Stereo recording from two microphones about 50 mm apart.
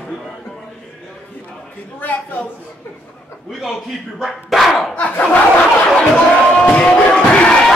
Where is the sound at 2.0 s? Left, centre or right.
Left.